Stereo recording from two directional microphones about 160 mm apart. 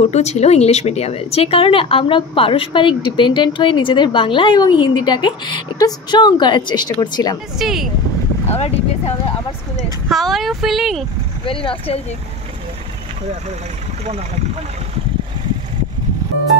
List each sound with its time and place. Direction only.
0.1 s speech: 45° left (ahead or behind); by 7.3 s 25° left (ahead or behind)
7.5 s speech: centre (ahead or behind)
8.5 s speech: 40° left (ahead or behind)
10.0 s speech: centre (ahead or behind)
11.4 s speech: 35° left (ahead or behind)